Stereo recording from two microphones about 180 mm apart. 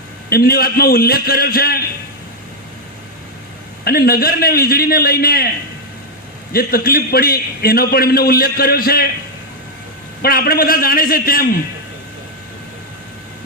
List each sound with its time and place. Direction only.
0.3 s a man's voice: 55° left (ahead or behind)
3.8 s a man's voice: 55° left (ahead or behind)
6.5 s a man's voice: 55° left (ahead or behind)
10.2 s a man's voice: 55° left (ahead or behind)